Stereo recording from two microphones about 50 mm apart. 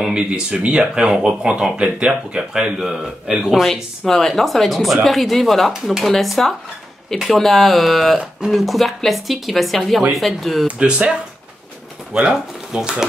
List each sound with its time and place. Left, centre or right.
0.0 s speech: centre
3.6 s speech: centre
5.7 s speech: centre
6.0 s speech: centre
10.8 s speech: centre